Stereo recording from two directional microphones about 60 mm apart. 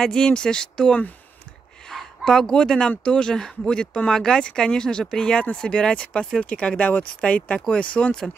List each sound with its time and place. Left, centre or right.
0.0 s speech: centre
1.9 s a sound: centre
3.1 s speech: centre